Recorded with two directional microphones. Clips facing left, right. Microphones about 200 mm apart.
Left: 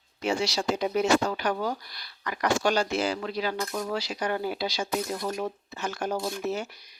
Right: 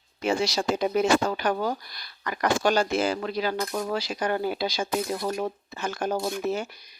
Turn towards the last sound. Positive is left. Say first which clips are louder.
# right 2 dB
turn(degrees=-50)  # may be behind; listen again after turning